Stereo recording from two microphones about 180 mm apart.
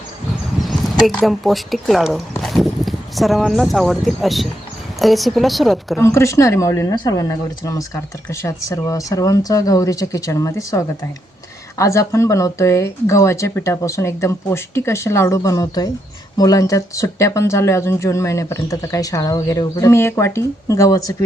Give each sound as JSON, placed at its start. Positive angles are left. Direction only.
{"t": 0.6, "sound": "a woman's voice", "side_deg": 0}
{"t": 6.0, "sound": "speech", "side_deg": 15}